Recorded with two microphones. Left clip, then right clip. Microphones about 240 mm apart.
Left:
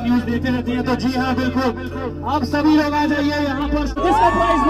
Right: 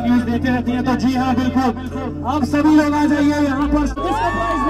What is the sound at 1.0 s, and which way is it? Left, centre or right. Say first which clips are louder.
Speech: right 2 dB; right.